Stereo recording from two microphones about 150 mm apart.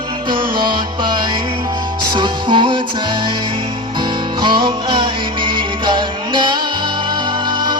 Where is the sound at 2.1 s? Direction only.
30° right (ahead or behind).